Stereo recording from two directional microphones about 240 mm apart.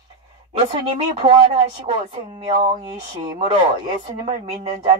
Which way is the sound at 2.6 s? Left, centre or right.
Right.